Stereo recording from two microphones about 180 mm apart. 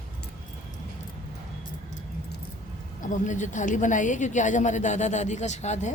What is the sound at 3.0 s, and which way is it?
A woman's voice, 45° left (ahead or behind).